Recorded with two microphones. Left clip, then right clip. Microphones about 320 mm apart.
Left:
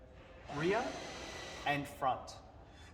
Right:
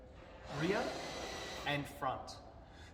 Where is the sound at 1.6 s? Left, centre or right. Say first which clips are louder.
Left 4 dB; centre.